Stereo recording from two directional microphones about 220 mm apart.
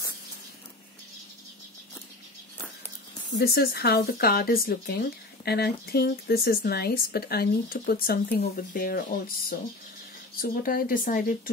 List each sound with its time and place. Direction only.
3.3 s speech: 50° left (ahead or behind)